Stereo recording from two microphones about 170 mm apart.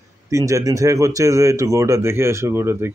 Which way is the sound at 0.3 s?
20° right (ahead or behind).